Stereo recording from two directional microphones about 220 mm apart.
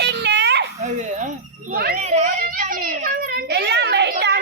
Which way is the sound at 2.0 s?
30° right (ahead or behind).